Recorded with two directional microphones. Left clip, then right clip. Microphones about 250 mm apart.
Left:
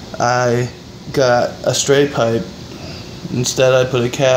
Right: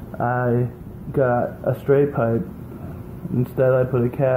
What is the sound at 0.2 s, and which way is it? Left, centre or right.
Speech, left.